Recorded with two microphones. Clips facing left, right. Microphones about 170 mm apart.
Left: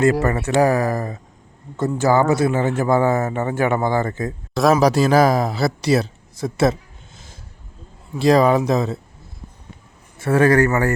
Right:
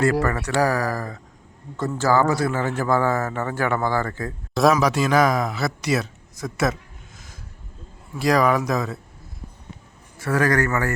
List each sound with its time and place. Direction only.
0.0 s speech: 25° left (ahead or behind)
4.7 s speech: 35° left (ahead or behind)
8.2 s speech: 25° left (ahead or behind)
10.2 s speech: 25° left (ahead or behind)